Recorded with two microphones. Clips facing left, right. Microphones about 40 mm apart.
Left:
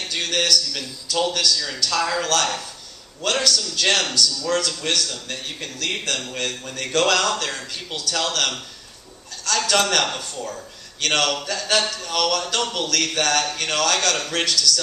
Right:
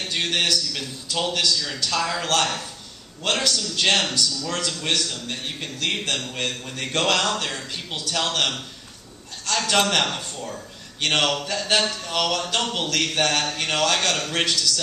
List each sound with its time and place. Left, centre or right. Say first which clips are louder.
0.1 s a man's voice: left 2 dB; right
1.9 s a man's voice: left 3 dB; centre
2.2 s a man's voice: left 1 dB; right
9.6 s a man's voice: left 1 dB; centre